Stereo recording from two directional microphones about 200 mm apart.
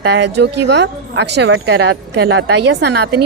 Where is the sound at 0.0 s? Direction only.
60° right (ahead or behind).